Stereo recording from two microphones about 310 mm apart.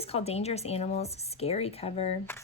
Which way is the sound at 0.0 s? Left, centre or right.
Centre.